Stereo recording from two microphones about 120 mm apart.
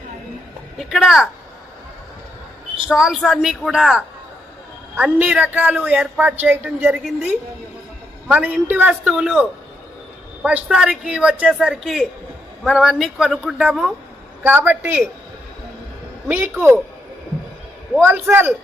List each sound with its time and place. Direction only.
0.8 s a woman's voice: centre (ahead or behind)
2.8 s speech: 5° right (ahead or behind)
8.3 s speech: 15° right (ahead or behind)
14.4 s speech: 15° right (ahead or behind)
16.3 s a man's voice: 20° right (ahead or behind)
18.0 s a man's voice: 20° right (ahead or behind)